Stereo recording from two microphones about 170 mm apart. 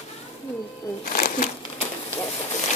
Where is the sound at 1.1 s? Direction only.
50° left (ahead or behind).